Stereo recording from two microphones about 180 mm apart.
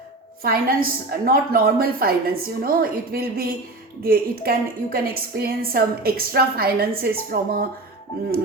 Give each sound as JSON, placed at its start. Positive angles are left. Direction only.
{"t": 0.4, "sound": "a woman's voice", "side_deg": -55}